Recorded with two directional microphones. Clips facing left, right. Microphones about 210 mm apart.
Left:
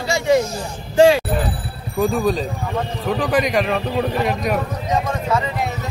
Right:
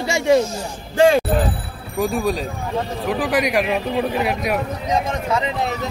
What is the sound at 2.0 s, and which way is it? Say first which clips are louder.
A man's voice: left 2 dB; 10° right (ahead or behind).